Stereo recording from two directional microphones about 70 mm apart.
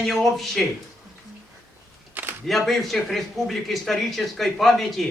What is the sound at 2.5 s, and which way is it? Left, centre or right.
A man's voice, centre.